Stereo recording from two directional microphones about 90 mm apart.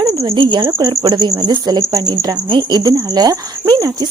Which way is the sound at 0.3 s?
60° right (ahead or behind).